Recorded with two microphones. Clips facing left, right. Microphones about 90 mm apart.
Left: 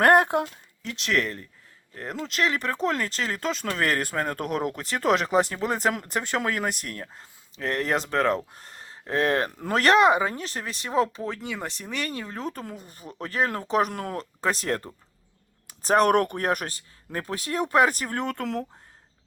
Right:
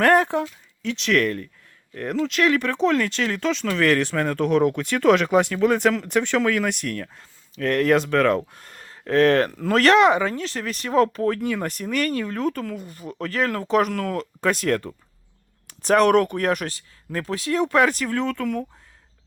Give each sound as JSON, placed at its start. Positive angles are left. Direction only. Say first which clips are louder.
{"t": 0.0, "sound": "speech", "louder": "right 1 dB", "side_deg": 55}
{"t": 1.1, "sound": "speech", "louder": "right 5 dB", "side_deg": 25}
{"t": 8.5, "sound": "a sound", "louder": "right 1 dB", "side_deg": 30}
{"t": 9.0, "sound": "speech", "louder": "right 7 dB", "side_deg": 20}
{"t": 10.1, "sound": "speech", "louder": "right 2 dB", "side_deg": 20}
{"t": 10.3, "sound": "speech", "louder": "right 5 dB", "side_deg": 35}
{"t": 11.4, "sound": "speech", "louder": "right 8 dB", "side_deg": 15}
{"t": 12.5, "sound": "speech", "louder": "right 7 dB", "side_deg": 35}
{"t": 12.9, "sound": "speech", "louder": "right 7 dB", "side_deg": -40}
{"t": 13.2, "sound": "speech", "louder": "right 2 dB", "side_deg": 30}